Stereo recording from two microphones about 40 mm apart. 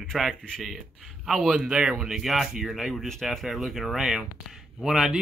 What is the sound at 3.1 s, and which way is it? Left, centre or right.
Speech, centre.